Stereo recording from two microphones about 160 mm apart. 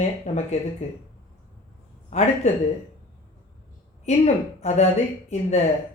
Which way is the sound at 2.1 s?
45° left (ahead or behind).